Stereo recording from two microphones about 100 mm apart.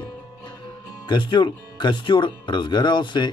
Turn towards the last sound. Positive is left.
turn(degrees=50)  # may be behind; listen again after turning